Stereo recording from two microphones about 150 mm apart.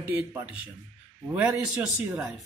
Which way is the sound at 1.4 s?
Centre (ahead or behind).